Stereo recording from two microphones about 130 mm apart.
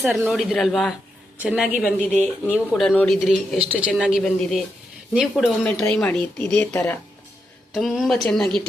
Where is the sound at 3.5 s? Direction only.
10° right (ahead or behind); by 7.0 s 15° left (ahead or behind).